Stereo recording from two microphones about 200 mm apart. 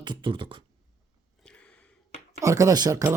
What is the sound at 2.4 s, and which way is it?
Speech, 15° right (ahead or behind).